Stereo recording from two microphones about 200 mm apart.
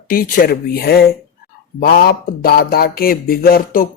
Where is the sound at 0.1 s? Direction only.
45° left (ahead or behind).